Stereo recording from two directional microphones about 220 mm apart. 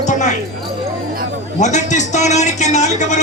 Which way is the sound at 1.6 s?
35° left (ahead or behind).